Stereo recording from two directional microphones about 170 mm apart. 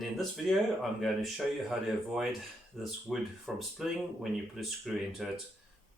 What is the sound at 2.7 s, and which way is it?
Speech, centre (ahead or behind).